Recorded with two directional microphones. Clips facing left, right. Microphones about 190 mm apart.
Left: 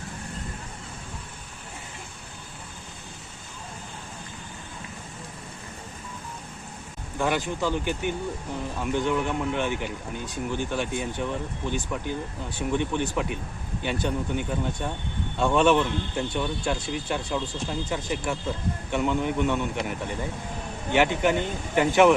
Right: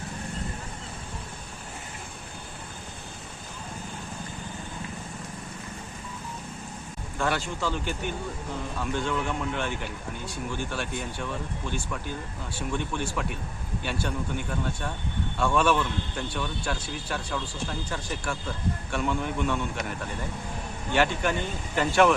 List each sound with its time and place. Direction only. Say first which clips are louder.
7.2 s a man's voice: left 3 dB; 15° left (ahead or behind)